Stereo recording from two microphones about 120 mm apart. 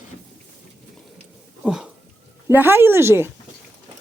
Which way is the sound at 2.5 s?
20° right (ahead or behind).